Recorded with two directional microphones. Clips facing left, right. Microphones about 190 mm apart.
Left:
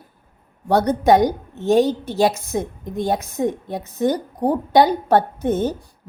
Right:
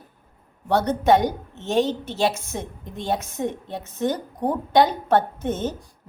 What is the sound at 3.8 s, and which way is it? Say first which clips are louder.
A woman's voice: left 5 dB; 35° left (ahead or behind).